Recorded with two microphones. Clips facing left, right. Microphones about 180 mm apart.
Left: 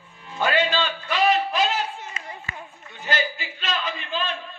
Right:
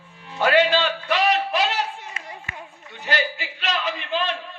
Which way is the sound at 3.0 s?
75° right (ahead or behind).